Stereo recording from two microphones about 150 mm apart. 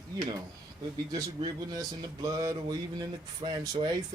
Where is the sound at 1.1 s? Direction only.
25° right (ahead or behind).